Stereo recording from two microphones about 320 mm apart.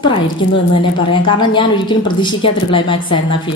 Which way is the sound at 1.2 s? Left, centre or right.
Centre.